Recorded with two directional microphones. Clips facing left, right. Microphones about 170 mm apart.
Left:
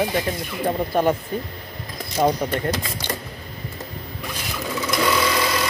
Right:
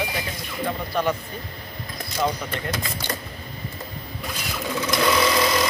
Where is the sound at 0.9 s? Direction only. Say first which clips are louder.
Left 4 dB; 50° left (ahead or behind).